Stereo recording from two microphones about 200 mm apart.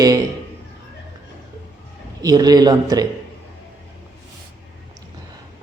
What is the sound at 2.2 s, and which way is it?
Speech, 20° right (ahead or behind).